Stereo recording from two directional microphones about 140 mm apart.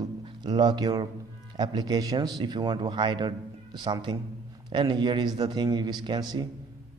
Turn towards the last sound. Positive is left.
turn(degrees=-30)  # may be behind; listen again after turning